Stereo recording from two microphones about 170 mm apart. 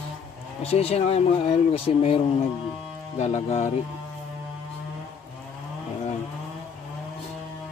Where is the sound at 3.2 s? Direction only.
40° left (ahead or behind).